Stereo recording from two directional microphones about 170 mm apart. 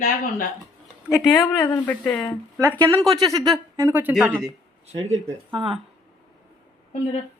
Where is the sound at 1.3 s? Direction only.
15° left (ahead or behind).